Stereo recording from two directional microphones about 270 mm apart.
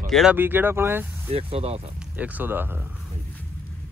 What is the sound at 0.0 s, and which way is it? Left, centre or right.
Speech, centre.